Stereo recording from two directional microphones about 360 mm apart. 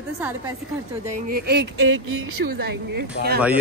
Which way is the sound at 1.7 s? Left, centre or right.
Right.